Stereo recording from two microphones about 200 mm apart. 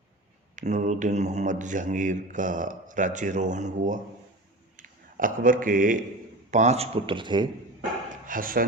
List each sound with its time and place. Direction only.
0.5 s speech: 40° right (ahead or behind)
8.1 s speech: 45° right (ahead or behind)